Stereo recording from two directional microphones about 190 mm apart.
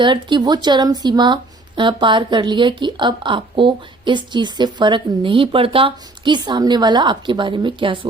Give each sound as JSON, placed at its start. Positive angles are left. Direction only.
{"t": 0.0, "sound": "speech", "side_deg": -25}